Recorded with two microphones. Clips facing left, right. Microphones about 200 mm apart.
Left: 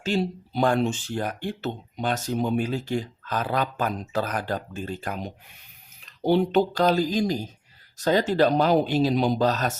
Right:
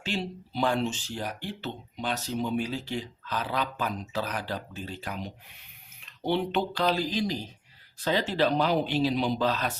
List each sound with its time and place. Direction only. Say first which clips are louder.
0.0 s speech: left 7 dB; 45° left (ahead or behind)